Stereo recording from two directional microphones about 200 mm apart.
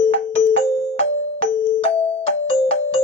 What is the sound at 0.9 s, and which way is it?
Music, 30° left (ahead or behind).